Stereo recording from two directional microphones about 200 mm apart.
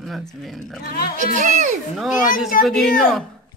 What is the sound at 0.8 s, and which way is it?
Speech, 50° left (ahead or behind).